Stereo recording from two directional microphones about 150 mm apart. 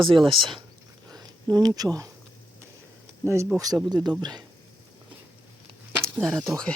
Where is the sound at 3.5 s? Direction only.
25° right (ahead or behind).